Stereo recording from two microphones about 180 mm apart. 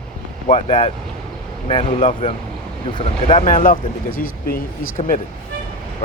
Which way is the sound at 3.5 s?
50° left (ahead or behind).